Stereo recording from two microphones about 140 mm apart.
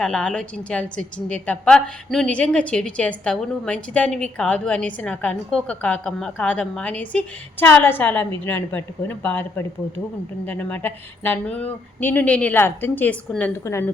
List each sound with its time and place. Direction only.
0.0 s a woman's voice: 5° left (ahead or behind)